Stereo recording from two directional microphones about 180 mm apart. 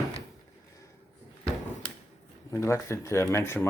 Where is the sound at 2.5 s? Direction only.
15° left (ahead or behind).